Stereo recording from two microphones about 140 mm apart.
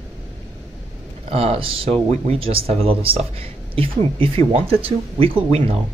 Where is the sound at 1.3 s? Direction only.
45° right (ahead or behind).